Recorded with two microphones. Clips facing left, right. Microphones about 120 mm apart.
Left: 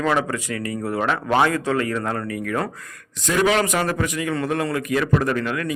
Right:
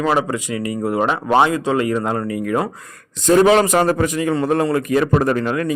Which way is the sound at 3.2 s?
35° right (ahead or behind).